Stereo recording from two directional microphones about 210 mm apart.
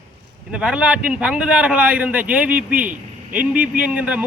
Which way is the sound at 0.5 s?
5° right (ahead or behind).